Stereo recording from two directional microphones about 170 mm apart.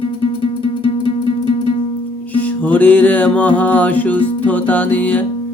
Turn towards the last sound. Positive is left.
turn(degrees=10)  # may be behind; listen again after turning